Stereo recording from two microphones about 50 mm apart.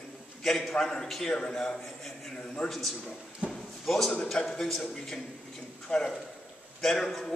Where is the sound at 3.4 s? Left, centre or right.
Centre.